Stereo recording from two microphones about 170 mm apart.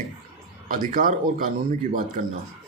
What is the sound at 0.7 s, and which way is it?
Speech, 55° right (ahead or behind).